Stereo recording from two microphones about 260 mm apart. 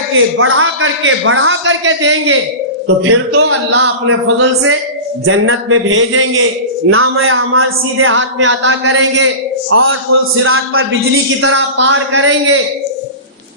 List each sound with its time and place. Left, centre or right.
0.3 s speech: right